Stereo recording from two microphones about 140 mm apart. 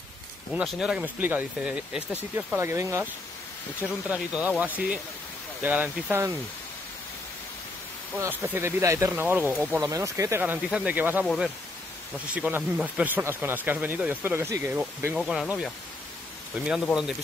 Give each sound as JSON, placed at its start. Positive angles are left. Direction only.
{"t": 0.6, "sound": "speech", "side_deg": -5}
{"t": 4.1, "sound": "speech", "side_deg": -10}
{"t": 8.2, "sound": "speech", "side_deg": -15}
{"t": 9.8, "sound": "speech", "side_deg": -25}
{"t": 12.4, "sound": "speech", "side_deg": -15}
{"t": 15.1, "sound": "speech", "side_deg": -5}